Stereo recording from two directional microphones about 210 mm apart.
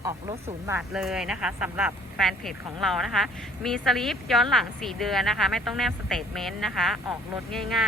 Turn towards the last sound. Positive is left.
turn(degrees=0)  # may be behind; listen again after turning